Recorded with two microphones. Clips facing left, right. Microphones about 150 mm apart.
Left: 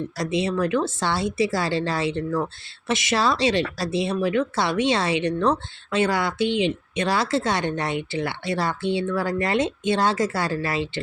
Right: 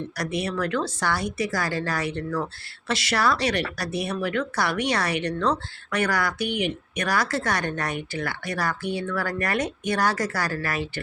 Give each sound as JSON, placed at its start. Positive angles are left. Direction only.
{"t": 0.2, "sound": "a woman's voice", "side_deg": 20}